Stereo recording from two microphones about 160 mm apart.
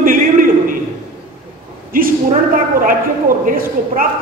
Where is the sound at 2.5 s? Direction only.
60° right (ahead or behind).